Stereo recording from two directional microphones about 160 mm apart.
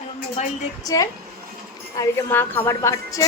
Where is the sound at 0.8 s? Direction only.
20° left (ahead or behind).